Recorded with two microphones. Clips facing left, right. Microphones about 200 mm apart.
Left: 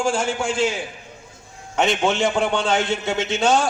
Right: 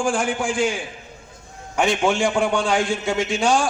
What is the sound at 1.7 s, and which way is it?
Speech, 25° left (ahead or behind).